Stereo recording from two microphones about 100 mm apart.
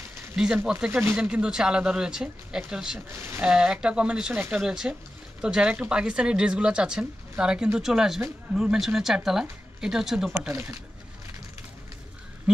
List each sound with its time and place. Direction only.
0.7 s a woman's voice: 10° right (ahead or behind)
3.1 s speech: 25° right (ahead or behind)
3.4 s a woman's voice: 10° right (ahead or behind)